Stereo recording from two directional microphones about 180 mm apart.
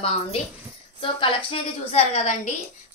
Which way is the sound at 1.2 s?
30° left (ahead or behind).